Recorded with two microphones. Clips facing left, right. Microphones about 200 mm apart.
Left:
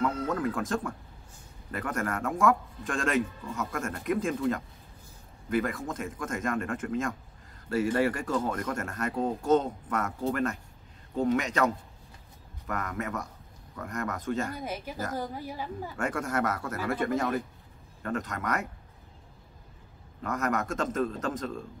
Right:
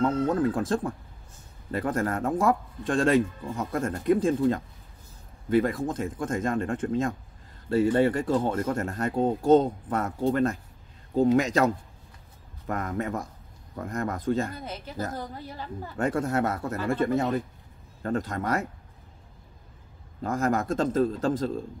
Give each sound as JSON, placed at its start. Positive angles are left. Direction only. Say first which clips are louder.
{"t": 0.0, "sound": "speech", "louder": "right 5 dB", "side_deg": -30}
{"t": 14.5, "sound": "a woman's voice", "louder": "left 2 dB", "side_deg": 10}
{"t": 16.0, "sound": "speech", "louder": "right 5 dB", "side_deg": -30}
{"t": 20.2, "sound": "speech", "louder": "right 4 dB", "side_deg": -30}